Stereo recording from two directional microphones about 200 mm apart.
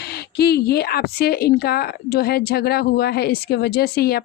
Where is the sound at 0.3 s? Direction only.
55° left (ahead or behind).